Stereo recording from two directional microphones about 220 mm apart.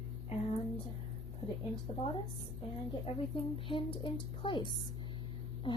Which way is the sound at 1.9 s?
25° left (ahead or behind).